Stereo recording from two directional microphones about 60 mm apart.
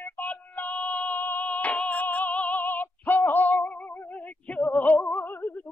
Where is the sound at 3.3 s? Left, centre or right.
Left.